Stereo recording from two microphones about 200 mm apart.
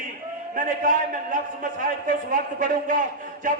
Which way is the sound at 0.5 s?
40° right (ahead or behind).